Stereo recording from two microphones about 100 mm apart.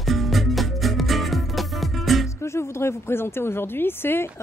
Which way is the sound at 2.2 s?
30° left (ahead or behind).